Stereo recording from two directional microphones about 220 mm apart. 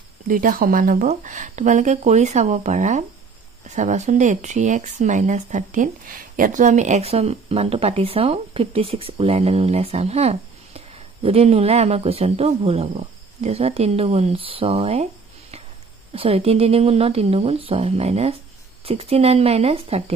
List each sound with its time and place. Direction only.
0.3 s speech: 40° right (ahead or behind)
16.1 s speech: 25° right (ahead or behind)